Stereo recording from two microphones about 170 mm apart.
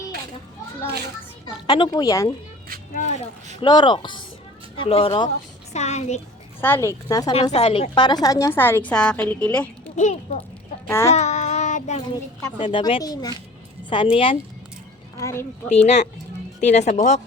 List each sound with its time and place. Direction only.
1.6 s speech: 25° left (ahead or behind)
2.9 s a sound: 50° left (ahead or behind)
3.6 s speech: 25° left (ahead or behind)
5.7 s a child's voice: 40° left (ahead or behind)
6.6 s a woman's voice: 15° left (ahead or behind)
7.5 s a woman's voice: 35° left (ahead or behind); by 9.9 s 5° left (ahead or behind)
10.0 s speech: 45° left (ahead or behind)
10.8 s a child's voice: 15° left (ahead or behind)
11.1 s child singing: 40° left (ahead or behind)
12.1 s a woman's voice: 15° left (ahead or behind)
12.5 s speech: 30° left (ahead or behind)
15.2 s a woman's voice: 15° left (ahead or behind)
16.6 s speech: 45° left (ahead or behind)